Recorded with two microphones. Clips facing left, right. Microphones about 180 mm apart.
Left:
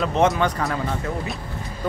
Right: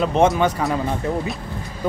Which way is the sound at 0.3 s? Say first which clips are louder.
Right 3 dB; 5° right (ahead or behind).